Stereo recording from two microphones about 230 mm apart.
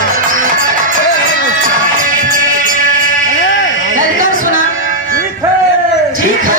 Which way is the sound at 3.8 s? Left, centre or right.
Right.